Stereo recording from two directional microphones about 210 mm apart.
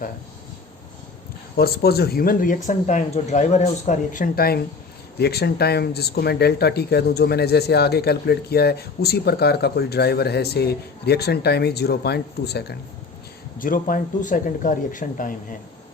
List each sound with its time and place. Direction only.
1.5 s speech: 45° left (ahead or behind)